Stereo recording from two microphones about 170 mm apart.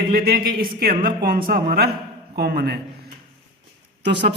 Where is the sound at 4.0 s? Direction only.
85° right.